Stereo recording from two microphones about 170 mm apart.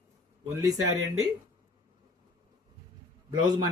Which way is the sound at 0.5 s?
20° right (ahead or behind).